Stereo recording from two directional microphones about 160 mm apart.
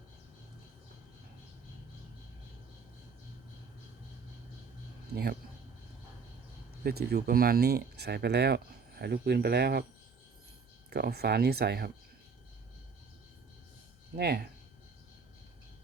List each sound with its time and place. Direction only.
5.1 s speech: 75° right (ahead or behind)
6.8 s speech: 80° right
10.8 s speech: 90° right
14.2 s speech: 80° right